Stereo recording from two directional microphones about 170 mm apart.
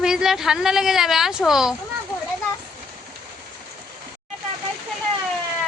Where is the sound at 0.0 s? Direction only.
5° right (ahead or behind).